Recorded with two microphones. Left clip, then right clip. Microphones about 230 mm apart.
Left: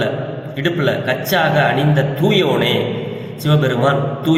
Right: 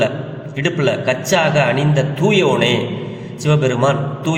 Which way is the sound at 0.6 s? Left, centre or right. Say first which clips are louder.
Right 1 dB; right.